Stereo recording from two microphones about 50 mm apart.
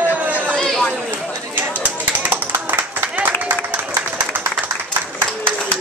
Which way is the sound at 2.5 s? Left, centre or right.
Right.